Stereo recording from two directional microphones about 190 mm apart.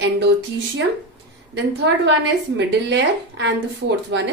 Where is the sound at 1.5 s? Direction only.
65° right (ahead or behind).